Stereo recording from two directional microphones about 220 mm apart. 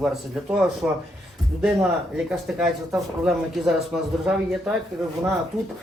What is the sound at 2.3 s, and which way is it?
Speech, centre (ahead or behind).